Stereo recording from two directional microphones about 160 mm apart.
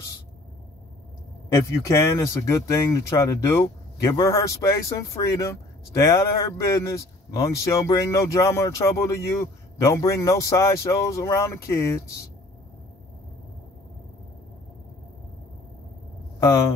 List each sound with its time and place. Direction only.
1.5 s speech: 20° left (ahead or behind)
16.3 s speech: 20° left (ahead or behind)